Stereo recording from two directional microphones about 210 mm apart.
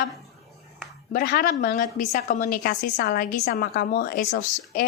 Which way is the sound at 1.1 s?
45° left (ahead or behind).